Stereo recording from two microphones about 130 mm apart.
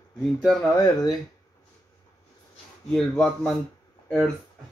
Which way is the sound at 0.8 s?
30° left (ahead or behind).